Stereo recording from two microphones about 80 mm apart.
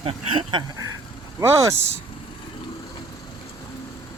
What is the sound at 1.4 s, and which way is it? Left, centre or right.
Speech, right.